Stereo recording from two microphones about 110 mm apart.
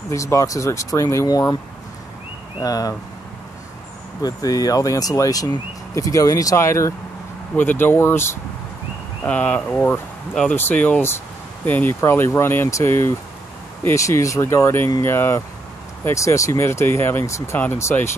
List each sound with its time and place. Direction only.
0.1 s speech: 30° left (ahead or behind)
2.6 s speech: 35° left (ahead or behind)
4.2 s speech: 35° left (ahead or behind)